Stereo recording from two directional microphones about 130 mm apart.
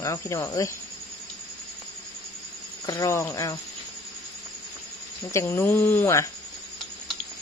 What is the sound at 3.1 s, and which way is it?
Speech, 20° left (ahead or behind).